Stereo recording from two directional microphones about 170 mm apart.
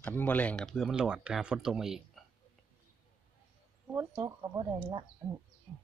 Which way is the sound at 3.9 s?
15° right (ahead or behind).